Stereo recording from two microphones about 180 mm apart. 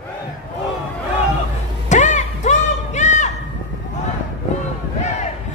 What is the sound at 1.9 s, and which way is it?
Music, 45° left (ahead or behind).